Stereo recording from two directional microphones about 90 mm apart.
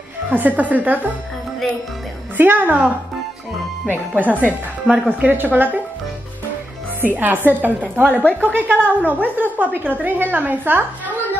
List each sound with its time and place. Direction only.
0.3 s a woman's voice: 20° right (ahead or behind)
2.3 s a woman's voice: 20° right (ahead or behind)
4.1 s a woman's voice: 20° right (ahead or behind)
7.0 s a woman's voice: 20° right (ahead or behind)
8.2 s speech: 20° left (ahead or behind)
8.5 s a woman's voice: 20° right (ahead or behind)